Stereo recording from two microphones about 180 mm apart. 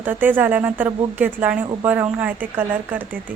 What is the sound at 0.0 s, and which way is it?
Speech, 10° right (ahead or behind).